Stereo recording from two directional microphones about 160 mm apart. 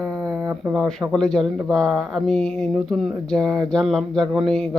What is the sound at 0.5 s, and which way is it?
Speech, 5° right (ahead or behind).